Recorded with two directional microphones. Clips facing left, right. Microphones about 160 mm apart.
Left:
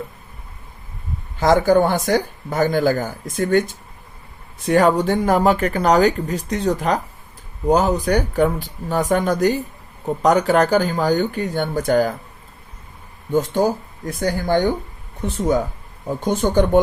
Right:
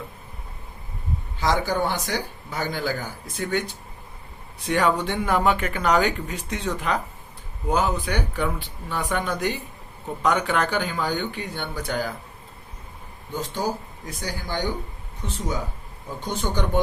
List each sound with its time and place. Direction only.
1.4 s speech: 50° left (ahead or behind)
4.6 s speech: 45° left (ahead or behind)
13.3 s speech: 50° left (ahead or behind)